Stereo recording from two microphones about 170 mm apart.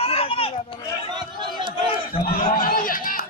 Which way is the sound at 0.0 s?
35° left (ahead or behind).